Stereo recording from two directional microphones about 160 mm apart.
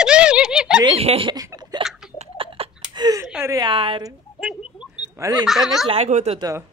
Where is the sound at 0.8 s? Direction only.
35° right (ahead or behind).